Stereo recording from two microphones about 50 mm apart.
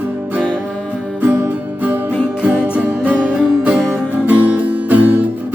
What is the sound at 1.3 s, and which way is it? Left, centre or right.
Music, right.